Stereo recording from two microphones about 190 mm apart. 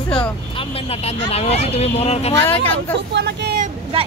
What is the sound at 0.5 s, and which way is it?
Speech, 30° left (ahead or behind).